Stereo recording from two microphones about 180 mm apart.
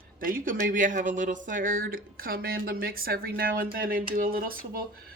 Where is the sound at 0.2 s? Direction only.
50° right (ahead or behind).